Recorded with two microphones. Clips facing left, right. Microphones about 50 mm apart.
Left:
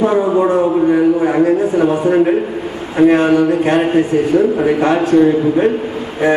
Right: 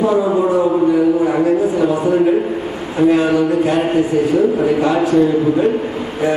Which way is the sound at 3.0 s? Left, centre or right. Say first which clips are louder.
Left 3 dB; left.